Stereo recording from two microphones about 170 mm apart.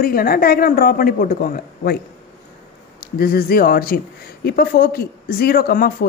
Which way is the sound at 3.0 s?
60° left (ahead or behind).